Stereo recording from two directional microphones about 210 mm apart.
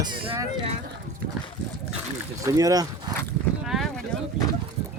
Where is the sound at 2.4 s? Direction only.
15° right (ahead or behind).